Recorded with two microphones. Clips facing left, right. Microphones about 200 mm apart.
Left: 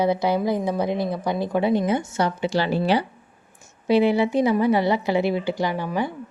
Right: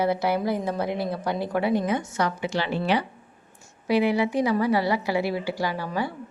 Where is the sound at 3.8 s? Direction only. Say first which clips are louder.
Left 4 dB; 25° left (ahead or behind).